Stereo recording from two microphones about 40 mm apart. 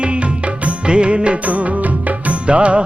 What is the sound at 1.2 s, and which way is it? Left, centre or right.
Music, right.